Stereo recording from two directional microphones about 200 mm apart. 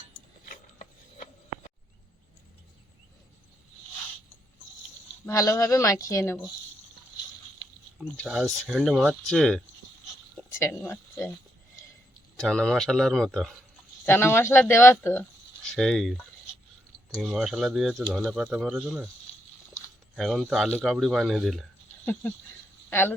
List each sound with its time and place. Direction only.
0.4 s a sound: 40° left (ahead or behind)
5.2 s speech: 15° left (ahead or behind)
8.0 s speech: 5° left (ahead or behind)
10.6 s speech: 15° left (ahead or behind)
12.4 s speech: centre (ahead or behind)
20.1 s speech: centre (ahead or behind)